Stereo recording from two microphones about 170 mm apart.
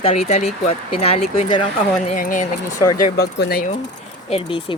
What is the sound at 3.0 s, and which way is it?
Speech, 65° left (ahead or behind).